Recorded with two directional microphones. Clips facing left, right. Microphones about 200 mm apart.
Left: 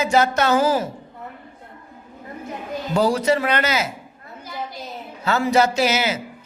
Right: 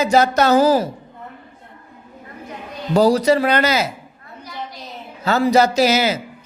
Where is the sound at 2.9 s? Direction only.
35° right (ahead or behind).